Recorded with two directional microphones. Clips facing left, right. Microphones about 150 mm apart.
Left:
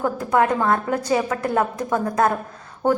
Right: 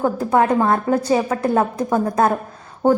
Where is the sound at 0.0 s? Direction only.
30° right (ahead or behind).